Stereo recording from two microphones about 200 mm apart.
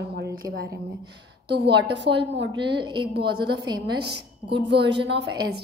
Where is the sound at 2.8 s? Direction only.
25° right (ahead or behind).